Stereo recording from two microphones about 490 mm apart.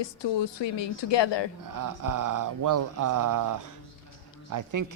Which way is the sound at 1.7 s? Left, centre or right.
Right.